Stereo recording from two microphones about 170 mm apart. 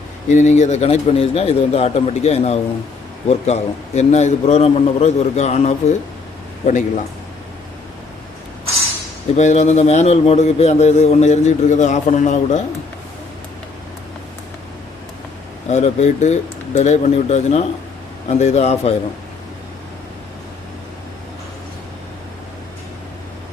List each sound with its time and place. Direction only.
0.3 s a man's voice: 45° left (ahead or behind)
9.3 s a man's voice: 40° left (ahead or behind)
15.7 s a man's voice: 40° left (ahead or behind)